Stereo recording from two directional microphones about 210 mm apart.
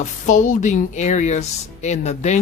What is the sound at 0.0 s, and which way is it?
Speech, 35° left (ahead or behind).